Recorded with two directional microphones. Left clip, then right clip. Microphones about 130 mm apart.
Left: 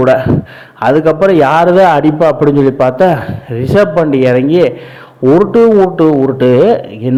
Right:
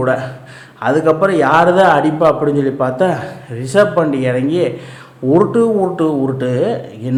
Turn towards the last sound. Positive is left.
turn(degrees=45)  # may be behind; listen again after turning